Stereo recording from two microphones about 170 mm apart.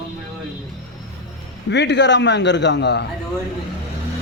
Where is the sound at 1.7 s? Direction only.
90° left.